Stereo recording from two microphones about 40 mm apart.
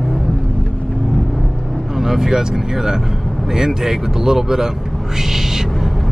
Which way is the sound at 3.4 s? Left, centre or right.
Centre.